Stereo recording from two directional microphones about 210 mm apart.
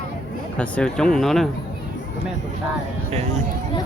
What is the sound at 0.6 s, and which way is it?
Speech, 5° left (ahead or behind).